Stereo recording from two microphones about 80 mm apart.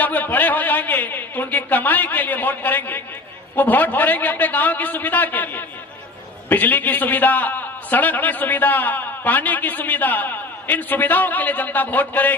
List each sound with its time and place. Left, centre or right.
0.0 s a man's voice: left